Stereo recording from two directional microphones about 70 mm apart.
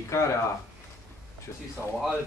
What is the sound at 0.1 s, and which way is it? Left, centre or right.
Speech, left.